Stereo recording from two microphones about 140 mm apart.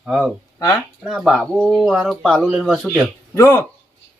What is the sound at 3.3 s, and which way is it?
Speech, 20° left (ahead or behind).